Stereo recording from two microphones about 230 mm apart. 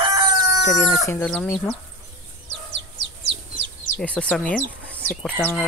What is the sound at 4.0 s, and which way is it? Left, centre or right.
Speech, centre.